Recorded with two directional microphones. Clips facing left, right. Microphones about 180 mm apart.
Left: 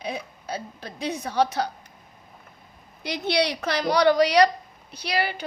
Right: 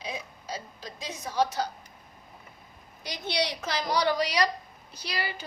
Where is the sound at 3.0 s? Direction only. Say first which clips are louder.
Left 6 dB; 65° left (ahead or behind).